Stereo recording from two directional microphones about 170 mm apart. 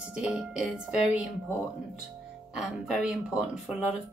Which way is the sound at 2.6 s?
5° right (ahead or behind).